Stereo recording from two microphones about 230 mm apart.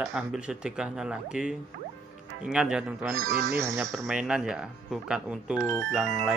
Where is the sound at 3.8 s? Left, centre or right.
Centre.